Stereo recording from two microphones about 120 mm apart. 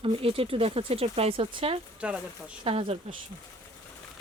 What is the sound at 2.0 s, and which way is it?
Speech, 10° right (ahead or behind).